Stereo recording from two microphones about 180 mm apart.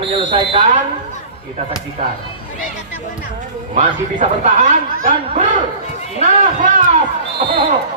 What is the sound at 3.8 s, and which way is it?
Speech, 45° right (ahead or behind).